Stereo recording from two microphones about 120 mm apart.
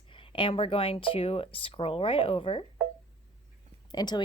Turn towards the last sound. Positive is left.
turn(degrees=35)  # may be behind; listen again after turning